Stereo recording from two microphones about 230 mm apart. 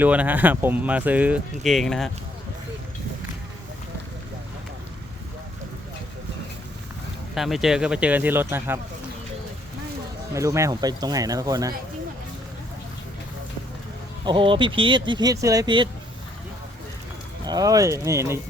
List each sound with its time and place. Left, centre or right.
0.0 s speech: centre
7.3 s speech: centre
10.3 s speech: centre
14.3 s speech: right
17.4 s speech: centre